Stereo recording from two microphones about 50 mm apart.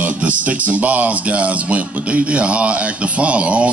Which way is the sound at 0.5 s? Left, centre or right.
Right.